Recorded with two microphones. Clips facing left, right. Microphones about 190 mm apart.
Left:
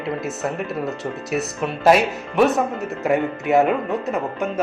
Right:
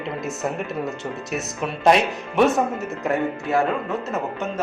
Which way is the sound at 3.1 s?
20° left (ahead or behind).